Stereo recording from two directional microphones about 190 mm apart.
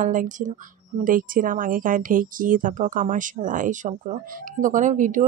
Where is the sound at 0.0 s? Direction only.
45° right (ahead or behind).